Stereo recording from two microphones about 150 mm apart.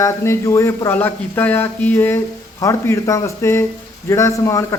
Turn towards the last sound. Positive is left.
turn(degrees=20)  # may be behind; listen again after turning